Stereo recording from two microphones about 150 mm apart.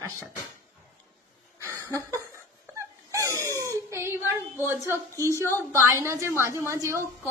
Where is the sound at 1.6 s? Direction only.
20° right (ahead or behind).